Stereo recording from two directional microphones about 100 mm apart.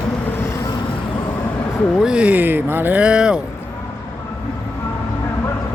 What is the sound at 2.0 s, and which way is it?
Speech, 10° right (ahead or behind).